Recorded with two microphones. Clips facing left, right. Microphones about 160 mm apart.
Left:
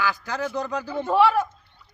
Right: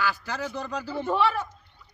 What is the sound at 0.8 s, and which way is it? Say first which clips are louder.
Speech: left 3 dB; 15° left (ahead or behind).